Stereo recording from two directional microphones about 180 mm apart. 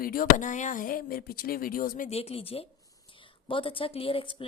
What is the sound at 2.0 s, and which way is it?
A woman's voice, 35° left (ahead or behind).